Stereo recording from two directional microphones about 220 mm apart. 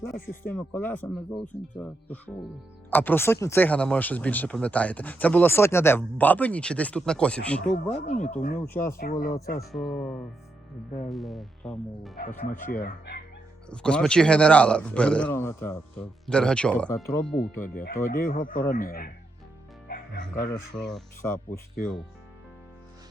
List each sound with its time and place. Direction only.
0.4 s speech: 10° left (ahead or behind)
8.0 s speech: 35° left (ahead or behind)
8.6 s speech: 10° left (ahead or behind)
9.0 s speech: 40° left (ahead or behind)
9.7 s speech: centre (ahead or behind)
12.7 s speech: 45° left (ahead or behind)
13.7 s speech: 5° left (ahead or behind)
17.4 s speech: 40° left (ahead or behind)
19.9 s music: 45° left (ahead or behind)
20.7 s speech: centre (ahead or behind)
21.2 s speech: 10° left (ahead or behind)